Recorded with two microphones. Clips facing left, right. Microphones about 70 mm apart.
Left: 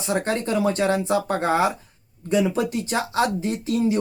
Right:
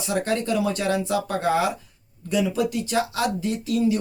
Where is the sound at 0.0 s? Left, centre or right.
Left.